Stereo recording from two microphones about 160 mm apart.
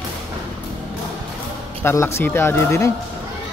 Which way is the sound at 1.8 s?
15° left (ahead or behind).